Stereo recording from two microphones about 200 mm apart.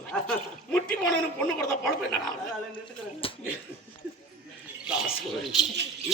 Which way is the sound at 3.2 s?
30° left (ahead or behind).